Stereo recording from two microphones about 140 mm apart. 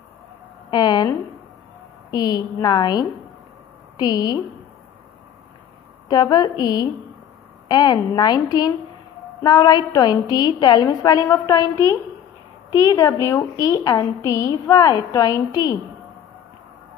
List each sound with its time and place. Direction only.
0.7 s a sound: 30° left (ahead or behind)
2.0 s a woman's voice: 30° left (ahead or behind)
6.0 s a woman's voice: 30° left (ahead or behind)
12.7 s a woman's voice: 25° left (ahead or behind)